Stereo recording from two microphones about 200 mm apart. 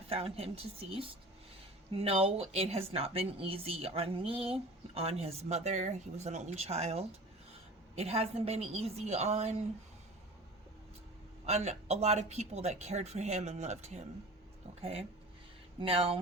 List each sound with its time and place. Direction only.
0.1 s a woman's voice: 30° right (ahead or behind)
11.4 s speech: 35° right (ahead or behind)